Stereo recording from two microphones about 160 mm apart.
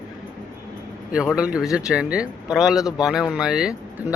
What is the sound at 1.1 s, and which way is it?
Speech, 5° right (ahead or behind).